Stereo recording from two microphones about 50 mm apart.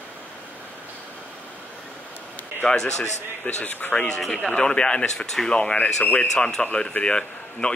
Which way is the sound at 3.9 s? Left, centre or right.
Left.